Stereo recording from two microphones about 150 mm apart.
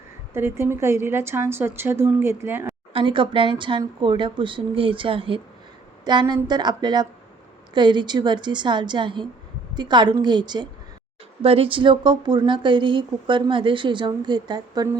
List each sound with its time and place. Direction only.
0.3 s a woman's voice: 15° right (ahead or behind)
2.9 s a woman's voice: 35° right (ahead or behind)